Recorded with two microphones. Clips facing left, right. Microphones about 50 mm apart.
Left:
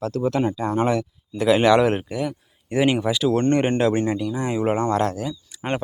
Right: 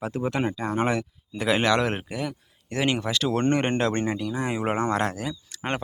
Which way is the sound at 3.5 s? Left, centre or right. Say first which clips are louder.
Left 4 dB; centre.